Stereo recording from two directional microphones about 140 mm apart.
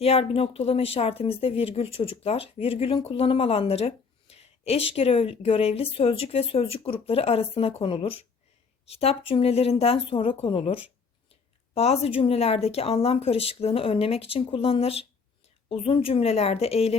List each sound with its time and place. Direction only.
0.0 s speech: 45° left (ahead or behind)